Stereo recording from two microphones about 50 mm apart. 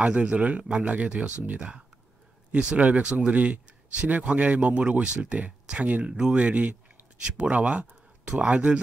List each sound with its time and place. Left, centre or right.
0.0 s speech: right
2.5 s speech: right